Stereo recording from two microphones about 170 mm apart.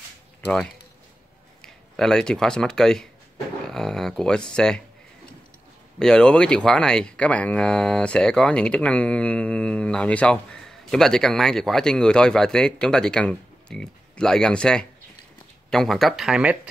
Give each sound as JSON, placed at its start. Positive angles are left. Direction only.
{"t": 2.0, "sound": "speech", "side_deg": 5}
{"t": 5.9, "sound": "speech", "side_deg": 5}